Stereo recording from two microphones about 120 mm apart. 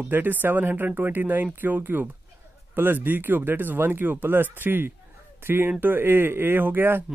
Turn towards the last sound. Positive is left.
turn(degrees=-15)  # may be behind; listen again after turning